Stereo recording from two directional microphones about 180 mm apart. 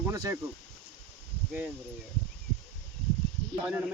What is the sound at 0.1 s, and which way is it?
Speech, 15° right (ahead or behind).